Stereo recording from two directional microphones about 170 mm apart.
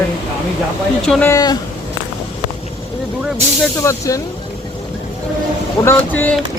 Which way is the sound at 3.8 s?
20° left (ahead or behind).